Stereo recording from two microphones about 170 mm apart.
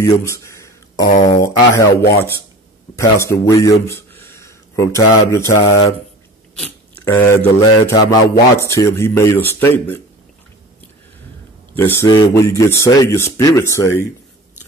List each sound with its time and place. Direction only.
0.0 s a sound: 20° left (ahead or behind)
1.2 s speech: 20° left (ahead or behind)
3.0 s speech: 15° left (ahead or behind)
11.7 s speech: 15° left (ahead or behind)